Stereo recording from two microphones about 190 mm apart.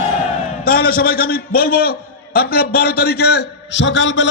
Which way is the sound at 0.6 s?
50° left (ahead or behind).